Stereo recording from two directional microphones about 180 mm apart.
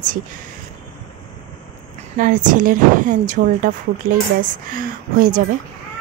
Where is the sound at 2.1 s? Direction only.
45° right (ahead or behind).